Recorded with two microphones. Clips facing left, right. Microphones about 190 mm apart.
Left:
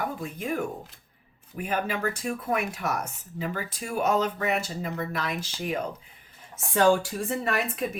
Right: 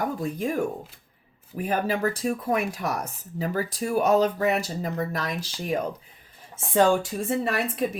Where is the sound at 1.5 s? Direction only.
35° right (ahead or behind).